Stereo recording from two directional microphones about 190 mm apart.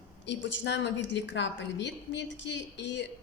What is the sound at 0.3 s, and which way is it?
A woman's voice, 70° left (ahead or behind).